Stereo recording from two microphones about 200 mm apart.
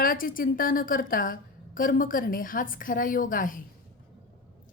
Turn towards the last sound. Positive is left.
turn(degrees=40)  # may be behind; listen again after turning